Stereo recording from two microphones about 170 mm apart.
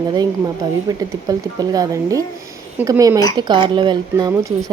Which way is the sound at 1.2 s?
20° right (ahead or behind).